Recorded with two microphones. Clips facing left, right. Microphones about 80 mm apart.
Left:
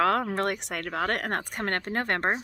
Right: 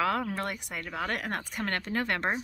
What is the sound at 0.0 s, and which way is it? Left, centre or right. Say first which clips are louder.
A woman's voice: left 5 dB; left.